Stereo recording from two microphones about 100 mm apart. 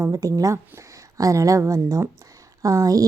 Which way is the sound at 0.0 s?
35° right (ahead or behind).